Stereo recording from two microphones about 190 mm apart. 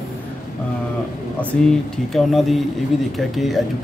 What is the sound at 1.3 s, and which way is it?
Speech, centre (ahead or behind).